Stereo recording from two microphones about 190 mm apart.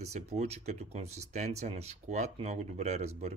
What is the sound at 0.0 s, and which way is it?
Speech, 35° right (ahead or behind).